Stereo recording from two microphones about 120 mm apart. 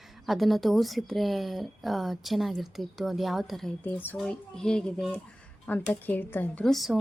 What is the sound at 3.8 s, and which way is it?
Speech, 15° left (ahead or behind).